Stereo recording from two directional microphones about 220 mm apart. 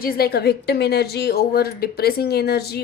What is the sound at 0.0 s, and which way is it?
A woman's voice, 45° left (ahead or behind).